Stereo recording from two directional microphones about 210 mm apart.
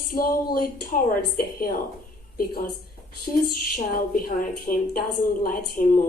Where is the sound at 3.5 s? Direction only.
45° left (ahead or behind).